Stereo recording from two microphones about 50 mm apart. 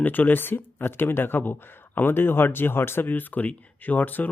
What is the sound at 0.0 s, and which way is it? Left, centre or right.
Speech, left.